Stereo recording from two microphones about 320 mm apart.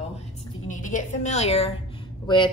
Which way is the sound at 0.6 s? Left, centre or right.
Left.